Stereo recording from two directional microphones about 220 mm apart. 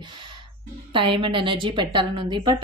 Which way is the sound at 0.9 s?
20° right (ahead or behind).